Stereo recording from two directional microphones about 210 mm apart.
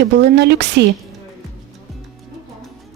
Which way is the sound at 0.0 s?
55° right (ahead or behind).